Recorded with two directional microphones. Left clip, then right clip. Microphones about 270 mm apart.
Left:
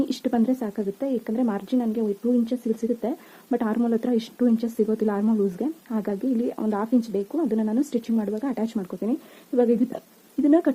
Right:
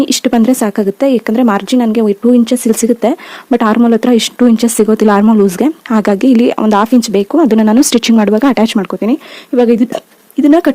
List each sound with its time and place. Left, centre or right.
0.0 s speech: right